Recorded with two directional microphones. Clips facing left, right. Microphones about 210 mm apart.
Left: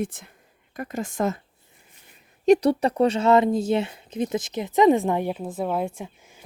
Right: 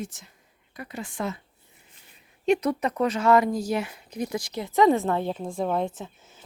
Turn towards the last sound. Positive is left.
turn(degrees=10)  # may be behind; listen again after turning